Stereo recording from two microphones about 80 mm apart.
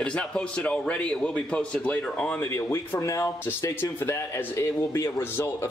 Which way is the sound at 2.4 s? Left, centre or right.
Left.